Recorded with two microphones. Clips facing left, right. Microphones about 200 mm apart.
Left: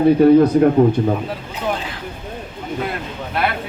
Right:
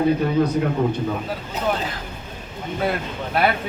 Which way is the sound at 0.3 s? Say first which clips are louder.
Left 8 dB; 50° left (ahead or behind).